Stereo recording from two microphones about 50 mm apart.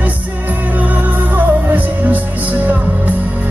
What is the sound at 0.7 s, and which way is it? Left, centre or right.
Music, right.